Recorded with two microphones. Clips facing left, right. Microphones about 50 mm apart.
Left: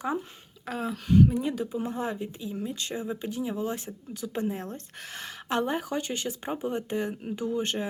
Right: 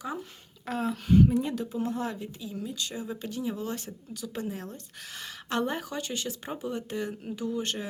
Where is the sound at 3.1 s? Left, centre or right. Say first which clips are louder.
Left 1 dB; centre.